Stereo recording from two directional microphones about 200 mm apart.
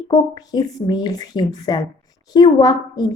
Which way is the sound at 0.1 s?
20° left (ahead or behind).